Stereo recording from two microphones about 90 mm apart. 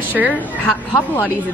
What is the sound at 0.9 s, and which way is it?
Speech, 30° left (ahead or behind).